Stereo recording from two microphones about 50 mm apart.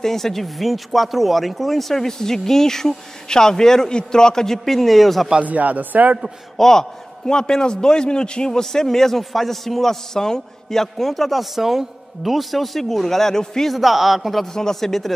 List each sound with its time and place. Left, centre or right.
0.0 s a man's voice: centre
5.4 s speech: right
6.5 s a man's voice: centre
13.7 s speech: centre
14.4 s a man's voice: centre